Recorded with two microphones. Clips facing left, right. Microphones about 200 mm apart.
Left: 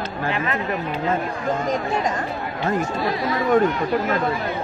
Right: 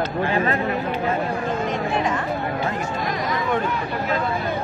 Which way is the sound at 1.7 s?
40° left (ahead or behind).